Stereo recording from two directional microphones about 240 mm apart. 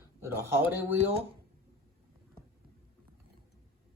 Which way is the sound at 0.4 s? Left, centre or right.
Centre.